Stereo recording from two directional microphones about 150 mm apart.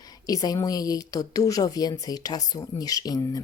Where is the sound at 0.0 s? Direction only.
25° left (ahead or behind).